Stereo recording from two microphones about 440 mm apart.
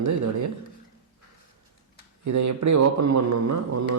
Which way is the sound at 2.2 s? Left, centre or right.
Right.